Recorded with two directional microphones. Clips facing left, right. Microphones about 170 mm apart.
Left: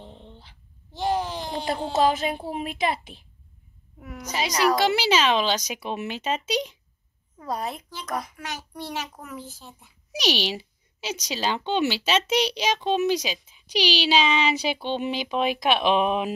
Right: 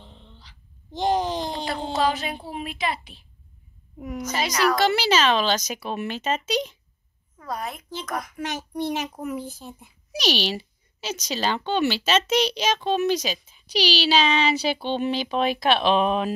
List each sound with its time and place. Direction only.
0.1 s dog: 50° left (ahead or behind)
0.9 s a sound: 20° right (ahead or behind)
1.9 s a woman's voice: 40° left (ahead or behind)
4.4 s a woman's voice: 15° left (ahead or behind)
7.4 s a child's voice: 30° left (ahead or behind)
8.4 s a child's voice: 20° right (ahead or behind)
10.1 s a woman's voice: 15° left (ahead or behind)
14.2 s speech: centre (ahead or behind)
14.5 s a woman's voice: 15° left (ahead or behind)